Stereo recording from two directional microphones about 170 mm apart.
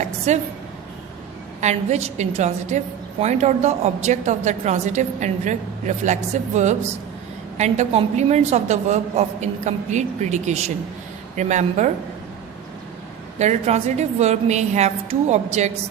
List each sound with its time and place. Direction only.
0.3 s a woman's voice: 45° right (ahead or behind)
1.6 s a woman's voice: 40° right (ahead or behind)
13.4 s a woman's voice: 40° right (ahead or behind)